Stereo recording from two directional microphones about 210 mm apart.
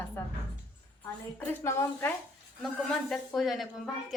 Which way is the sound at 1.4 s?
10° left (ahead or behind).